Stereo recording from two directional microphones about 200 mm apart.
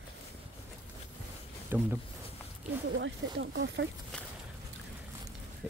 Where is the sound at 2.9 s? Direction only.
60° right (ahead or behind).